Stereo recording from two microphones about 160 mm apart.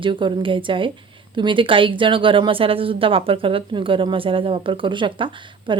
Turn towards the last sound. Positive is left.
turn(degrees=-30)  # may be behind; listen again after turning